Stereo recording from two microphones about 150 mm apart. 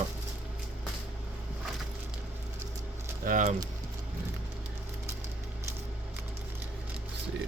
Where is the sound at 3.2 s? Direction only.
60° right (ahead or behind).